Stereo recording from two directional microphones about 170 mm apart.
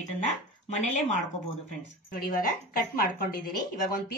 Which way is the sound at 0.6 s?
45° left (ahead or behind).